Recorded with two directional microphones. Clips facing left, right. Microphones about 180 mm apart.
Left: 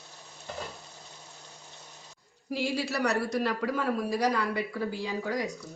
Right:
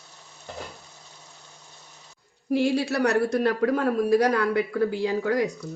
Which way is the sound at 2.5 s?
60° right (ahead or behind).